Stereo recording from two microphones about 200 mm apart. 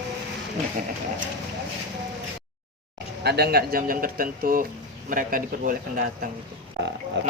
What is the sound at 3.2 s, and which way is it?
Speech, 55° right (ahead or behind).